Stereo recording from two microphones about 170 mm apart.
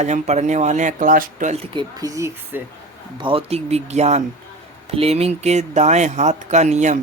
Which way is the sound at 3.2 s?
35° right (ahead or behind).